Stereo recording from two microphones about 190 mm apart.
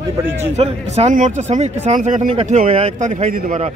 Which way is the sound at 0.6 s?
35° right (ahead or behind).